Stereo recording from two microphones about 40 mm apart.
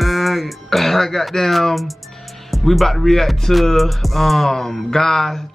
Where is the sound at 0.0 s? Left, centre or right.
Centre.